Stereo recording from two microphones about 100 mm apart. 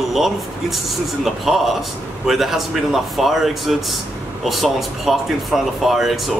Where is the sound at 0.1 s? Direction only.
Centre (ahead or behind).